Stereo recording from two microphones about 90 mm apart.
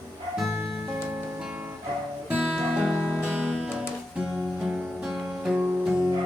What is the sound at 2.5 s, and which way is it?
Music, 5° right (ahead or behind).